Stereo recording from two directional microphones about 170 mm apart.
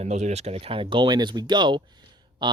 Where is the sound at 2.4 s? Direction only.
25° right (ahead or behind).